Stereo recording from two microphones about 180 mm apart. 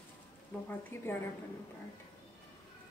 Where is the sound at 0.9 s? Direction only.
15° left (ahead or behind).